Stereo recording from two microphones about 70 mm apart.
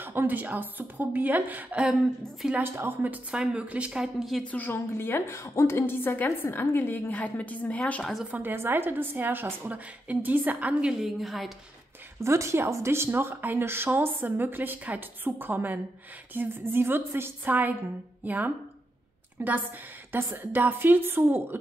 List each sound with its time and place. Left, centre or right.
0.0 s a woman's voice: right; by 2.0 s centre
2.6 s a woman's voice: right; by 4.1 s centre
4.2 s a woman's voice: centre
4.5 s a woman's voice: left
8.3 s a woman's voice: right
11.0 s a woman's voice: centre
12.2 s a woman's voice: right